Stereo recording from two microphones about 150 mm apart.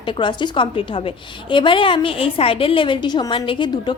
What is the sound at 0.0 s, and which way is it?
A woman's voice, 35° left (ahead or behind).